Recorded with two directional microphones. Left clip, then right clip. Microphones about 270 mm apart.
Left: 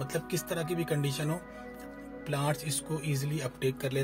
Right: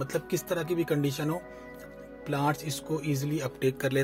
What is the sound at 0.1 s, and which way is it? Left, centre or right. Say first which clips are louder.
Speech: right 3 dB; centre.